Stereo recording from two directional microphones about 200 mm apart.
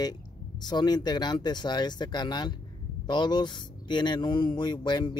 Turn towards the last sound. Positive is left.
turn(degrees=20)  # may be behind; listen again after turning